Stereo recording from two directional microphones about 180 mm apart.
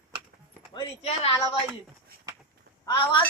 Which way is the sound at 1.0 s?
35° left (ahead or behind).